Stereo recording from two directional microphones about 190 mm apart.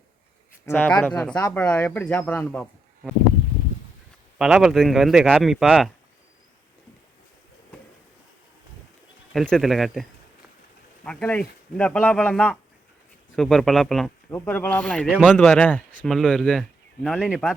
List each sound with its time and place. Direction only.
0.6 s speech: 10° left (ahead or behind)
1.4 s speech: 15° left (ahead or behind)
1.6 s speech: 5° left (ahead or behind)
4.4 s speech: centre (ahead or behind)
9.3 s speech: centre (ahead or behind)